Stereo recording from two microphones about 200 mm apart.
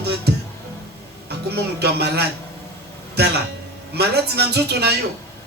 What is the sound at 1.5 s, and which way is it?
Speech, 55° right (ahead or behind).